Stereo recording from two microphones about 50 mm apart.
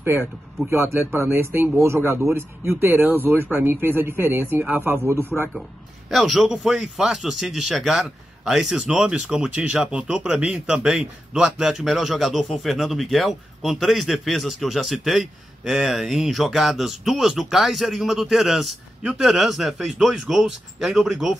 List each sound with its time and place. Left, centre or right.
0.0 s speech: right
0.7 s speech: right
4.6 s speech: right
4.9 s speech: right
6.0 s a man's voice: centre
6.5 s a man's voice: centre